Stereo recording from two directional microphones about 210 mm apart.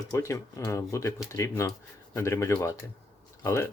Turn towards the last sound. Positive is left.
turn(degrees=15)  # may be behind; listen again after turning